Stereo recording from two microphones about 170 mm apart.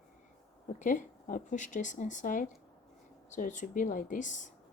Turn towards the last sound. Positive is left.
turn(degrees=45)  # may be behind; listen again after turning